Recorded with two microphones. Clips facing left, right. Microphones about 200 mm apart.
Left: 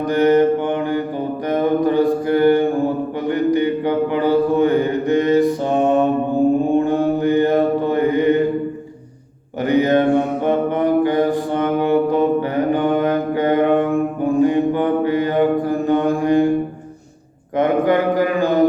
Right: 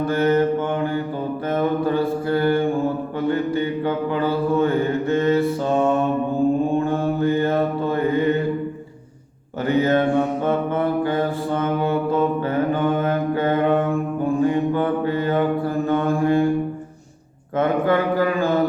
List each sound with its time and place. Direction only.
0.0 s mantra: 15° left (ahead or behind)
9.6 s mantra: 15° left (ahead or behind)
17.6 s a sound: 15° left (ahead or behind)